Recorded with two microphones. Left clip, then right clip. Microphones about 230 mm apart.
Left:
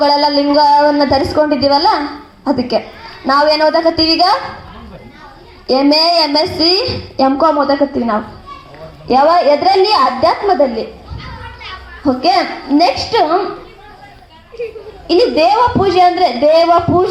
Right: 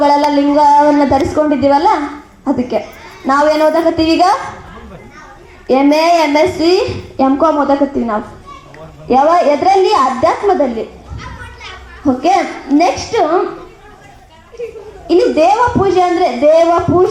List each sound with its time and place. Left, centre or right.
0.0 s a woman's voice: left
5.6 s a woman's voice: left
12.0 s a woman's voice: left
15.0 s a woman's voice: left